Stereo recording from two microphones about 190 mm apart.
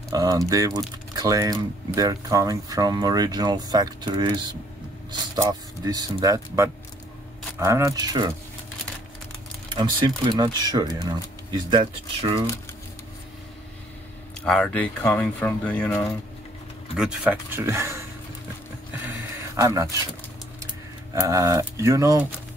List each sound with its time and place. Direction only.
0.1 s speech: 20° right (ahead or behind)
9.8 s speech: 20° right (ahead or behind)
14.4 s speech: 5° left (ahead or behind)
16.9 s speech: 5° right (ahead or behind)
19.0 s a sound: 15° right (ahead or behind)
21.1 s speech: 15° right (ahead or behind)